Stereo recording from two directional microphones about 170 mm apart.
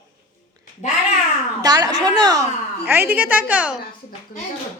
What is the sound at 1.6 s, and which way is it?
A woman's voice, 20° right (ahead or behind).